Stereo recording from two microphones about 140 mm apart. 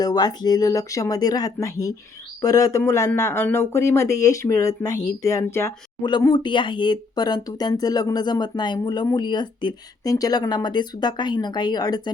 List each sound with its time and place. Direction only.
0.0 s speech: 25° left (ahead or behind)
6.0 s speech: 30° left (ahead or behind)